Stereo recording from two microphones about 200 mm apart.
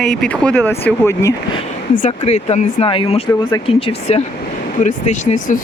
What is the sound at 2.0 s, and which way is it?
Speech, 35° left (ahead or behind).